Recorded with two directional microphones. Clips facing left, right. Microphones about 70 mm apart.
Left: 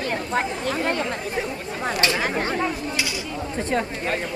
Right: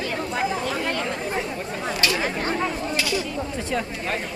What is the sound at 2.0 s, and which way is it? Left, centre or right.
Chatter, left.